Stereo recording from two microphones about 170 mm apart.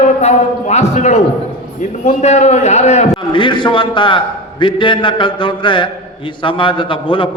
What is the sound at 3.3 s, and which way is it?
A man's voice, 30° left (ahead or behind).